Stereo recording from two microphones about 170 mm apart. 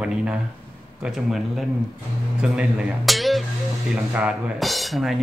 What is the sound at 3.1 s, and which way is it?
Music, centre (ahead or behind).